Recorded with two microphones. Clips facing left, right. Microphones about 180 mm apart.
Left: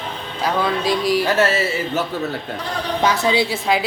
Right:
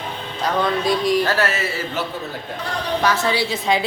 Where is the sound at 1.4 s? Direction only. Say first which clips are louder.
Left 4 dB; 25° left (ahead or behind).